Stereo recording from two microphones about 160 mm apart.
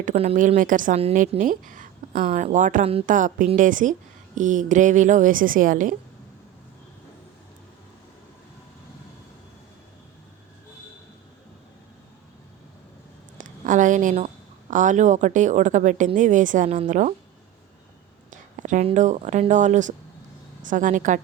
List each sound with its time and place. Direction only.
0.0 s a woman's voice: 45° right (ahead or behind)
2.1 s speech: 40° right (ahead or behind)
13.4 s a sound: 50° right (ahead or behind)
14.7 s speech: 50° right (ahead or behind)
18.3 s a sound: 50° right (ahead or behind)
18.9 s speech: 45° right (ahead or behind)